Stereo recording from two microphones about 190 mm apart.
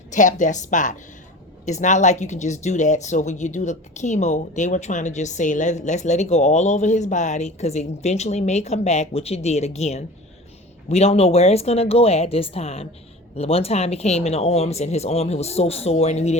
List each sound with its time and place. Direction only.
0.1 s speech: 40° left (ahead or behind)